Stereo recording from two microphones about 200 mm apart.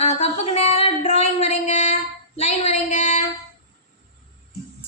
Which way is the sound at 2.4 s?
30° left (ahead or behind).